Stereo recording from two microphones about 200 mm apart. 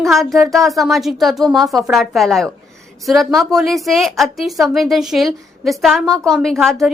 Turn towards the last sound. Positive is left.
turn(degrees=0)  # may be behind; listen again after turning